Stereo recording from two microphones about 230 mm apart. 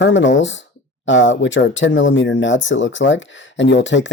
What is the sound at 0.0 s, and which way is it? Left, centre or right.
Speech, left.